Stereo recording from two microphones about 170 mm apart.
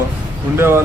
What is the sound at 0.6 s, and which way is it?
Speech, 15° right (ahead or behind).